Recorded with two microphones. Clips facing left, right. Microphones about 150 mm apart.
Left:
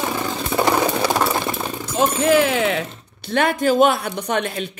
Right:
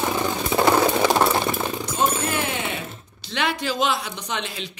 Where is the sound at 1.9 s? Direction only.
90° left.